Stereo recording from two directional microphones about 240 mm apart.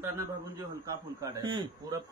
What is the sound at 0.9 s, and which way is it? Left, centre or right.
Speech, centre.